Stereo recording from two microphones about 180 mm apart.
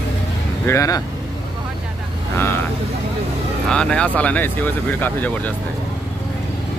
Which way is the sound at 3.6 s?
5° left (ahead or behind).